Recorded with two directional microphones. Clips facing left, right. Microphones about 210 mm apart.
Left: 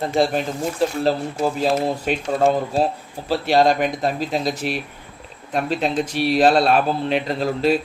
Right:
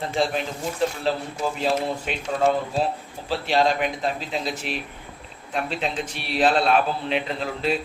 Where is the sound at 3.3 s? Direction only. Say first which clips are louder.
Left 5 dB; 40° left (ahead or behind).